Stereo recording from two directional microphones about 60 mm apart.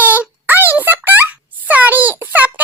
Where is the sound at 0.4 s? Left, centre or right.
Right.